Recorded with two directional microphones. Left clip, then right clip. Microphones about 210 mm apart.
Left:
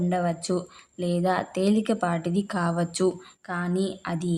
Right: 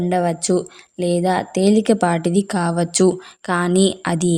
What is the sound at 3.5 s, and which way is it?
Speech, 45° right (ahead or behind).